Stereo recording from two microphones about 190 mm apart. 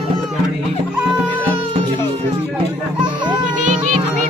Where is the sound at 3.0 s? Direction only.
25° right (ahead or behind).